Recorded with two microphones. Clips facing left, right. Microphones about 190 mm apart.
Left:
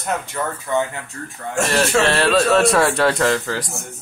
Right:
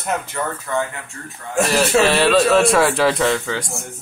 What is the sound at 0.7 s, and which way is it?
Speech, 15° left (ahead or behind).